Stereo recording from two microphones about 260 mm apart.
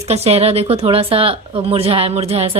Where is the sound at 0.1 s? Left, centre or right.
Right.